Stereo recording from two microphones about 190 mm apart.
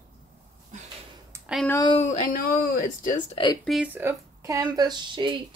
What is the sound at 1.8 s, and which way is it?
Speech, 35° left (ahead or behind).